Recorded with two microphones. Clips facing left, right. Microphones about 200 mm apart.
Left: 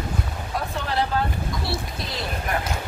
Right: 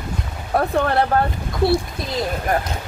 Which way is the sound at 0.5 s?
60° right (ahead or behind).